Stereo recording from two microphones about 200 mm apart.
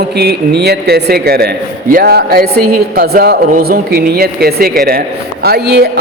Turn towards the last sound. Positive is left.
turn(degrees=-55)  # may be behind; listen again after turning